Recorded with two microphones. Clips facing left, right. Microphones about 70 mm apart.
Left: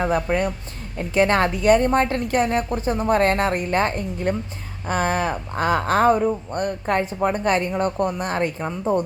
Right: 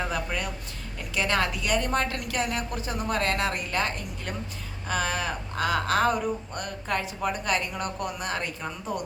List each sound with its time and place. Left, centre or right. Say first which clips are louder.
0.0 s speech: left 9 dB; left